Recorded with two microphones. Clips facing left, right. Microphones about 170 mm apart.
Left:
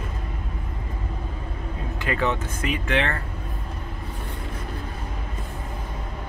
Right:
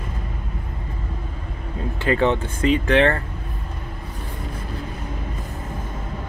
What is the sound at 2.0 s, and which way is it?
Speech, 30° right (ahead or behind).